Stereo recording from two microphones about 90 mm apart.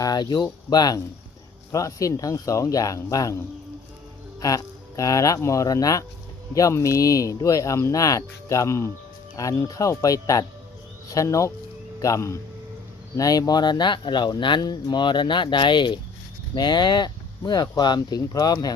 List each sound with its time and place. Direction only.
0.0 s speech: 50° left (ahead or behind)
4.4 s speech: 40° left (ahead or behind)